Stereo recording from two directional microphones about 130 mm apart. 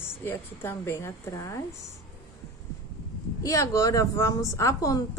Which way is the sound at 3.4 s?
25° left (ahead or behind).